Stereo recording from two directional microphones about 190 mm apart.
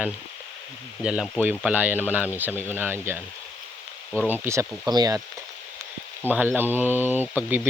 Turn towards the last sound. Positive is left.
turn(degrees=-10)  # may be behind; listen again after turning